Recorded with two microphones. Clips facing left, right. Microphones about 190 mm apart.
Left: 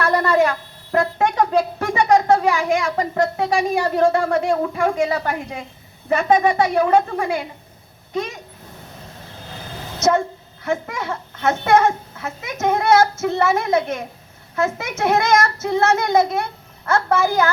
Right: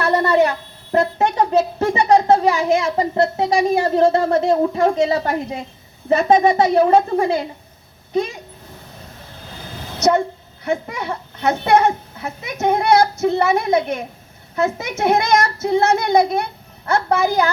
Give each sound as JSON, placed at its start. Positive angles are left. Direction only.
{"t": 0.3, "sound": "speech", "side_deg": -20}
{"t": 10.1, "sound": "a child's voice", "side_deg": -15}